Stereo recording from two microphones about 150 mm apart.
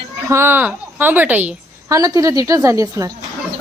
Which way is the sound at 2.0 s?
20° right (ahead or behind).